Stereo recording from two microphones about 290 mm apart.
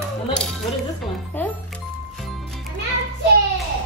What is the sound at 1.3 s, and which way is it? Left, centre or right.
Music, centre.